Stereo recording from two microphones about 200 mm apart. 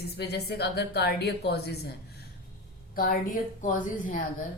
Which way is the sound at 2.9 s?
45° left (ahead or behind).